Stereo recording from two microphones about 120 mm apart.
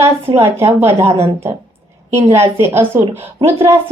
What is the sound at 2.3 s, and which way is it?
Speech, 20° right (ahead or behind).